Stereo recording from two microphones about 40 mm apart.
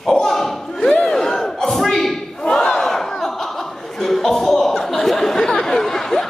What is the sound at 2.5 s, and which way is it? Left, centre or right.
Battle cry, centre.